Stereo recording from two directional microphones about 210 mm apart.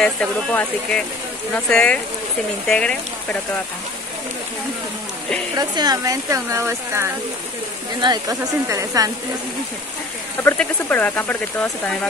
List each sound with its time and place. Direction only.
0.0 s speech: 5° left (ahead or behind)
5.6 s speech: 20° right (ahead or behind)
10.4 s speech: 10° left (ahead or behind)